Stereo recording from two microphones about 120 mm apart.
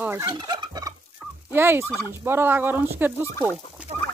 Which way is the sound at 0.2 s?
35° right (ahead or behind).